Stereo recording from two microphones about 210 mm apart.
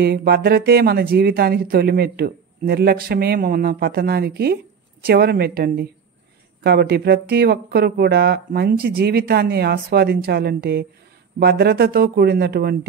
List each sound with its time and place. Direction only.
0.0 s speech: 50° right (ahead or behind)